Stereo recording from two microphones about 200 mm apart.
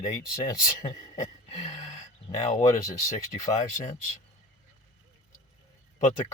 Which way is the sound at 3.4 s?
35° left (ahead or behind).